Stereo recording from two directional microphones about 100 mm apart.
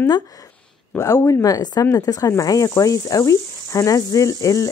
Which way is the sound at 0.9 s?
30° left (ahead or behind).